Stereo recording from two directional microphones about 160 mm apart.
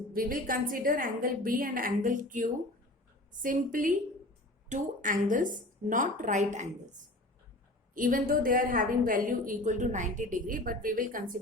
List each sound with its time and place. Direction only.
0.1 s a woman's voice: 60° right (ahead or behind)
7.9 s a woman's voice: 60° right (ahead or behind)